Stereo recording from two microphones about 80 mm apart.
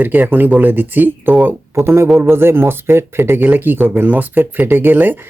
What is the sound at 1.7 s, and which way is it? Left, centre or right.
Speech, right.